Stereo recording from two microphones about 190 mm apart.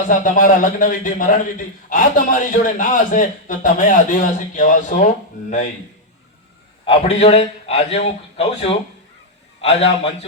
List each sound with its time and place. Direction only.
0.0 s a man's voice: 45° left (ahead or behind)
6.8 s a man's voice: 35° left (ahead or behind)